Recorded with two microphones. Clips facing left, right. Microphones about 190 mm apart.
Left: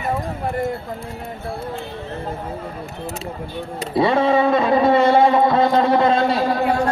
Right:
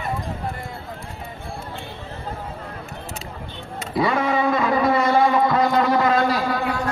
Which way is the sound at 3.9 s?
30° left (ahead or behind).